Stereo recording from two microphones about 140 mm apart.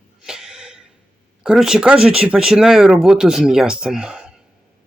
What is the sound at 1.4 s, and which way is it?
Speech, 5° right (ahead or behind).